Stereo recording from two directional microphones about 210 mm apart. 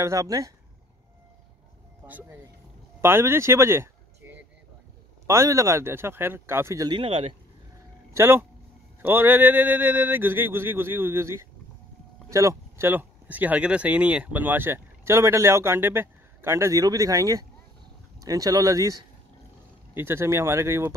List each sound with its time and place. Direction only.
0.0 s speech: 15° right (ahead or behind)
2.0 s speech: 10° right (ahead or behind)
5.2 s speech: 15° right (ahead or behind)
7.0 s speech: 30° right (ahead or behind)
8.1 s speech: 10° right (ahead or behind)